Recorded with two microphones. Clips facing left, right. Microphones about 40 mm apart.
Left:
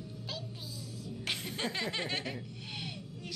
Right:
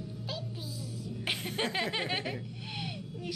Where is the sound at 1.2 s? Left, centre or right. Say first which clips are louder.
Right 3 dB; right.